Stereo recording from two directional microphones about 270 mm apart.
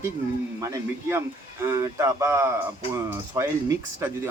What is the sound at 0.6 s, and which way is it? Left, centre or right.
Speech, centre.